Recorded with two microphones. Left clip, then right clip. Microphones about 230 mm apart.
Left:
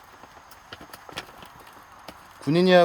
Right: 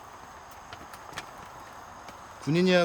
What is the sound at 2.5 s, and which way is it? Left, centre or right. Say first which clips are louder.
Speech: left 6 dB; centre.